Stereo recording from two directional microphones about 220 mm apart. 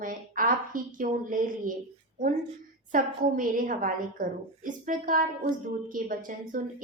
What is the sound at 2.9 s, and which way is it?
A woman's voice, 40° right (ahead or behind).